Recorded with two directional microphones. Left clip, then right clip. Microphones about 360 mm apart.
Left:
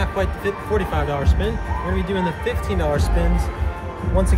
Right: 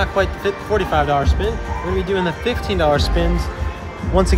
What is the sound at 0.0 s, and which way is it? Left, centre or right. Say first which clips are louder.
Speech: right 5 dB; centre.